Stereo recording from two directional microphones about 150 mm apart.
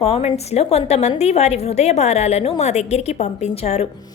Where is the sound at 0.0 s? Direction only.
40° left (ahead or behind).